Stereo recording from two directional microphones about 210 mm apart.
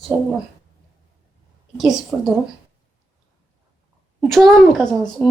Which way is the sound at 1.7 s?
Centre (ahead or behind).